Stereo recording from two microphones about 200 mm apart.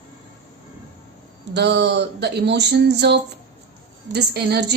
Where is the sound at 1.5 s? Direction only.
60° right (ahead or behind).